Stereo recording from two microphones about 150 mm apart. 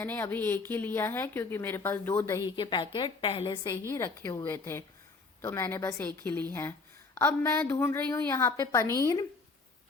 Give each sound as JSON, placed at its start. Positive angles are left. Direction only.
{"t": 0.0, "sound": "a woman's voice", "side_deg": 15}
{"t": 2.6, "sound": "a woman's voice", "side_deg": 30}
{"t": 3.6, "sound": "a woman's voice", "side_deg": 20}